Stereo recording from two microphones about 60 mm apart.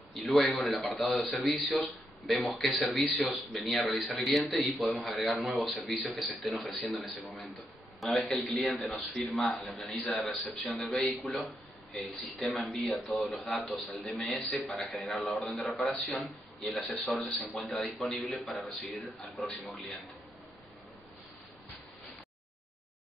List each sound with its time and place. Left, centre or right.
0.1 s a man's voice: centre